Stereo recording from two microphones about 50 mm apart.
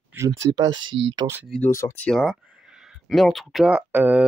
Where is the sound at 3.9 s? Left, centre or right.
Right.